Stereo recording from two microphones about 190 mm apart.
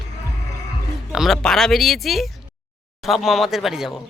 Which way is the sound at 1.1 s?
Centre (ahead or behind).